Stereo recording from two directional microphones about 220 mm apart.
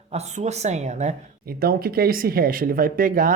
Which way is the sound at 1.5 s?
45° right (ahead or behind).